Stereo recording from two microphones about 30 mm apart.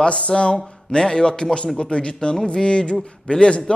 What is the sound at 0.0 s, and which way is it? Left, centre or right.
A man's voice, left.